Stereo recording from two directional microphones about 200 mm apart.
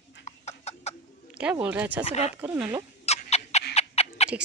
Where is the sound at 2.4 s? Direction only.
10° right (ahead or behind).